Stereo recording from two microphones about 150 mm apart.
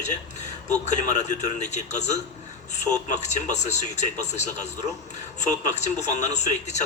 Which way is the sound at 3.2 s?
50° left (ahead or behind).